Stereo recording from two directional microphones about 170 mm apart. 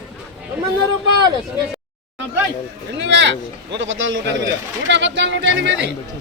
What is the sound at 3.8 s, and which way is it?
Speech, 90° right.